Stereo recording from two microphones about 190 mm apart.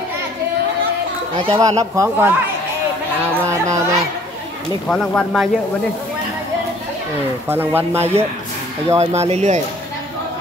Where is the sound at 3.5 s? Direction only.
15° right (ahead or behind).